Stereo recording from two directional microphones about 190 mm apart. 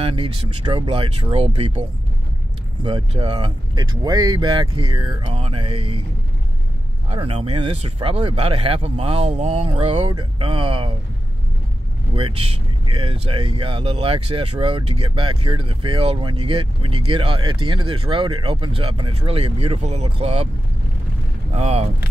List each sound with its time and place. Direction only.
0.0 s speech: 30° right (ahead or behind)
7.1 s speech: 30° right (ahead or behind)
12.2 s speech: 30° right (ahead or behind)
21.5 s speech: 30° right (ahead or behind)